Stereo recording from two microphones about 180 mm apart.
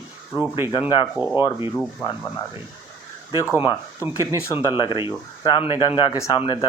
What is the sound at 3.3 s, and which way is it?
Speech, 15° left (ahead or behind).